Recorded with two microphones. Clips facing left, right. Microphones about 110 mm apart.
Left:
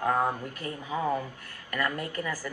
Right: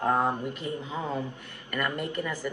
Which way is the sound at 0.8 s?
15° left (ahead or behind).